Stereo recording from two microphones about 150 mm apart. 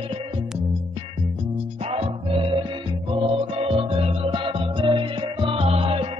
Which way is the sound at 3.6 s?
40° right (ahead or behind).